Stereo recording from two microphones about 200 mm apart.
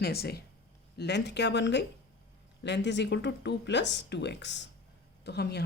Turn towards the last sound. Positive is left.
turn(degrees=55)  # may be behind; listen again after turning